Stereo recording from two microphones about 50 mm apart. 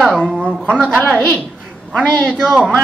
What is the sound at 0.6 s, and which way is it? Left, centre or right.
Speech, centre.